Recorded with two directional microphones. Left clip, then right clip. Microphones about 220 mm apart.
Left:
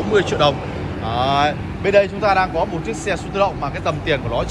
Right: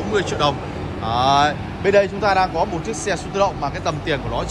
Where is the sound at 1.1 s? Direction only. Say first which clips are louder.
Right 1 dB; 20° right (ahead or behind).